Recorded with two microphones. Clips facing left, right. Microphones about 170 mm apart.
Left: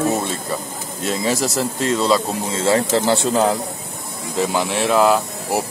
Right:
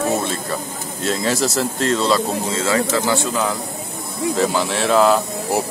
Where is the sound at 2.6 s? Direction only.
25° left (ahead or behind).